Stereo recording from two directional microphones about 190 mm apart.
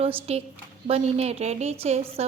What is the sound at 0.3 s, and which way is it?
A woman's voice, 30° right (ahead or behind).